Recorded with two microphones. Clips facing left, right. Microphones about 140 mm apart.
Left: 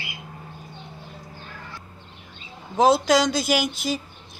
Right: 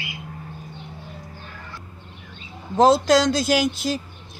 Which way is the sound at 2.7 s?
Centre (ahead or behind).